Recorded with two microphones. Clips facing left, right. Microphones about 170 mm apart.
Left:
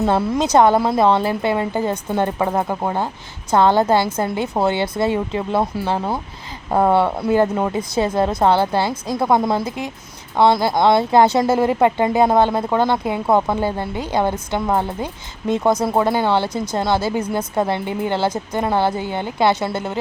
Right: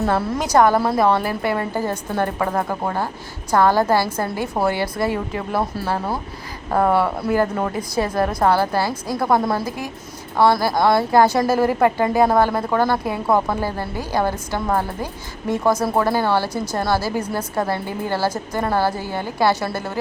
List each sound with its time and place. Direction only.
0.0 s a woman's voice: 20° left (ahead or behind)